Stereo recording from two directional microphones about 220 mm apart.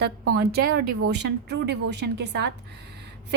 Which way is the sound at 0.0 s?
45° right (ahead or behind).